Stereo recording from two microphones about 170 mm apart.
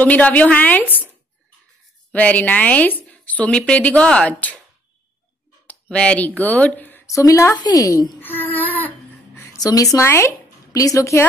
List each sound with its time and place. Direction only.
0.0 s a woman's voice: 10° left (ahead or behind)
2.1 s a woman's voice: 10° left (ahead or behind)
5.7 s a woman's voice: 5° left (ahead or behind)
8.2 s a sound: 10° left (ahead or behind)